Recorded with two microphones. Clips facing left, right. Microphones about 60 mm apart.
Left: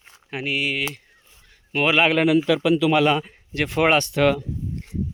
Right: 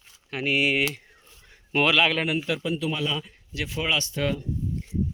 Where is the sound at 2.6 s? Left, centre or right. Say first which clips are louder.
Left 10 dB; left.